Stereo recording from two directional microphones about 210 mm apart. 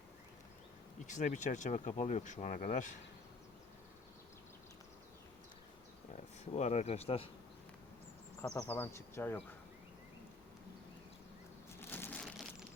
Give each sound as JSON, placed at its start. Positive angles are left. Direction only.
{"t": 1.0, "sound": "speech", "side_deg": 35}
{"t": 6.4, "sound": "speech", "side_deg": 30}
{"t": 8.4, "sound": "speech", "side_deg": 10}
{"t": 11.8, "sound": "crushing", "side_deg": 10}